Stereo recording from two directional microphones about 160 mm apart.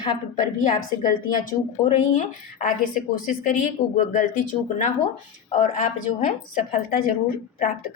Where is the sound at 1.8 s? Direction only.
30° left (ahead or behind).